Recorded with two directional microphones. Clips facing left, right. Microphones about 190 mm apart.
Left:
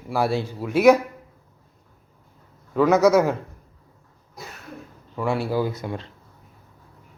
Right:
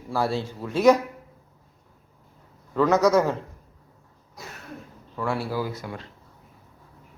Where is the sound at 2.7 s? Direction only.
10° left (ahead or behind).